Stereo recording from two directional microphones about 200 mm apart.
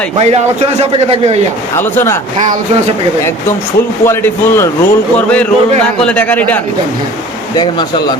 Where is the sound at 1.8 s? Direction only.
10° left (ahead or behind).